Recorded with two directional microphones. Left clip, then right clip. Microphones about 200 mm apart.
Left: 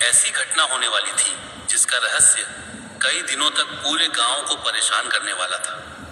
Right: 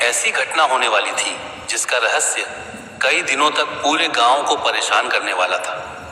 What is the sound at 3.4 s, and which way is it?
Speech, 55° right (ahead or behind).